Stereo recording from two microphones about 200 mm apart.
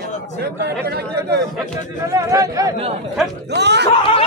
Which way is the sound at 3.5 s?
55° right (ahead or behind).